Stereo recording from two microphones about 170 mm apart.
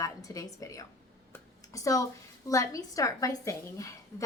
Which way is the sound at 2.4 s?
20° left (ahead or behind).